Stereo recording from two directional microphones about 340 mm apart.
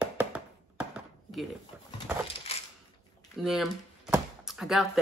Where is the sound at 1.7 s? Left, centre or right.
Centre.